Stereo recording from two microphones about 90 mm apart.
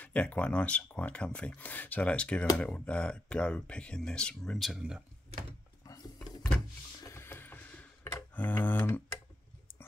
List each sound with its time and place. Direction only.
0.0 s speech: 15° left (ahead or behind)
4.6 s speech: 5° right (ahead or behind)
7.0 s a sound: 30° left (ahead or behind)